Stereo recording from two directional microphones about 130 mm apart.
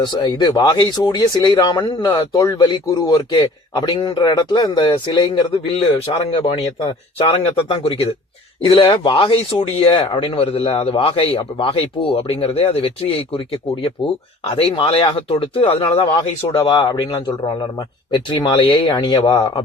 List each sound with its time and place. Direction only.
0.0 s a man's voice: 35° left (ahead or behind)
16.6 s speech: 35° left (ahead or behind)